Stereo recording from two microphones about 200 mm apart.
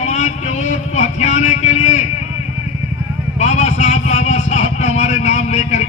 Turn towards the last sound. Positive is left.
turn(degrees=35)  # may be behind; listen again after turning